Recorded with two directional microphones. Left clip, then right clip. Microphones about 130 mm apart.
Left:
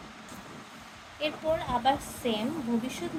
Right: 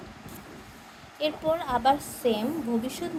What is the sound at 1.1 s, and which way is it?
A woman's voice, 50° right (ahead or behind).